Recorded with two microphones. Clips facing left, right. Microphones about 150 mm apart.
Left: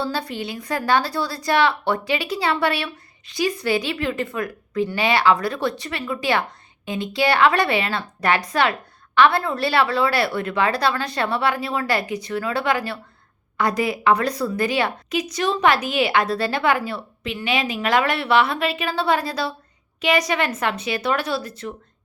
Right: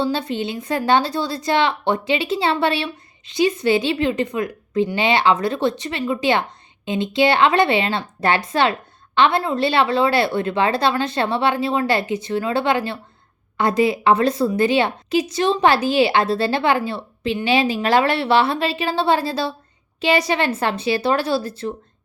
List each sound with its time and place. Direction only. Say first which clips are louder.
0.0 s a woman's voice: right 4 dB; 20° right (ahead or behind)